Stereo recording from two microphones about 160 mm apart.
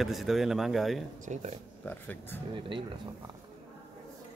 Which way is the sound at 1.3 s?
50° right (ahead or behind).